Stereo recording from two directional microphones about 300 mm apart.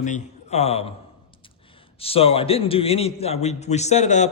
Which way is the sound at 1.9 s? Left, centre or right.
Centre.